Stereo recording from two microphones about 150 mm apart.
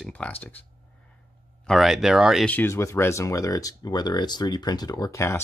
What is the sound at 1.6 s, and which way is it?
Speech, centre (ahead or behind).